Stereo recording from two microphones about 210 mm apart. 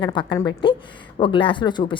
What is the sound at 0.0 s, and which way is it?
A woman's voice, 20° left (ahead or behind).